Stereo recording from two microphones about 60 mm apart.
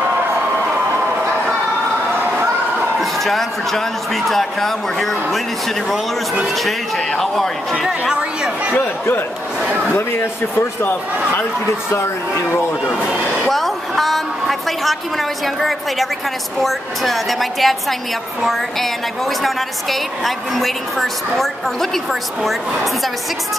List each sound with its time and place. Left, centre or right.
3.0 s a woman's voice: centre
6.4 s a woman's voice: centre
8.0 s speech: centre
9.9 s speech: left
13.5 s a woman's voice: centre